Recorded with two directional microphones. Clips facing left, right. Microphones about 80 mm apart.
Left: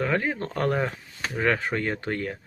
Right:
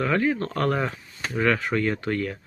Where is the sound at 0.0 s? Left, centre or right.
Left.